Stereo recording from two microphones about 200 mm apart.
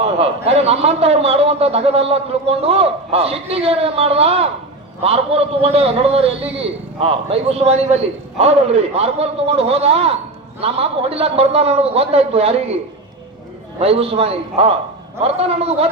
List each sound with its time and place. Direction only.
0.0 s a man's voice: 30° right (ahead or behind)
13.7 s a man's voice: 30° right (ahead or behind)